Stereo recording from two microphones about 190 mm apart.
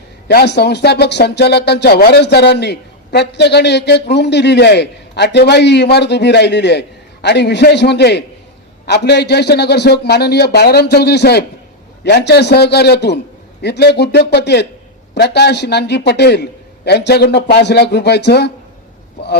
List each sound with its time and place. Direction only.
0.3 s speech: 60° left (ahead or behind)